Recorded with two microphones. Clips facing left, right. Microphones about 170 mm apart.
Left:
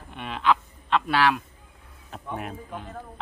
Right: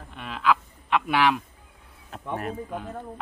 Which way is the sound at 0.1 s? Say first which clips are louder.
Even; centre (ahead or behind).